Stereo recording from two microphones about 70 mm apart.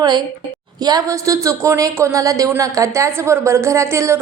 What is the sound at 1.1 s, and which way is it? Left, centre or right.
Speech, right.